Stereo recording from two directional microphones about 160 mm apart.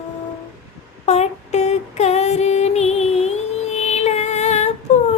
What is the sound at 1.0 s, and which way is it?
Female singing, 45° left (ahead or behind).